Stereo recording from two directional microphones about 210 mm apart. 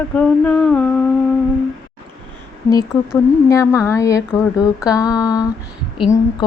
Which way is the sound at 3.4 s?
10° left (ahead or behind).